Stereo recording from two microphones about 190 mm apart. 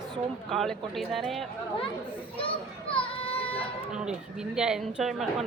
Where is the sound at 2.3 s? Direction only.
30° left (ahead or behind).